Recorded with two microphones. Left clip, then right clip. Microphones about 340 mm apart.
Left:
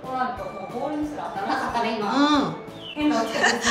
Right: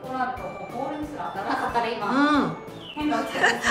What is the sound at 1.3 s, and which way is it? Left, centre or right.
Speech, centre.